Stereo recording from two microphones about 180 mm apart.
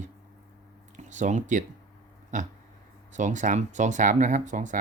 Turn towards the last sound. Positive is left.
turn(degrees=-45)  # may be behind; listen again after turning